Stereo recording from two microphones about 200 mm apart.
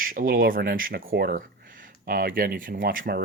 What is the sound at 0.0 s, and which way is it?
Speech, 45° right (ahead or behind).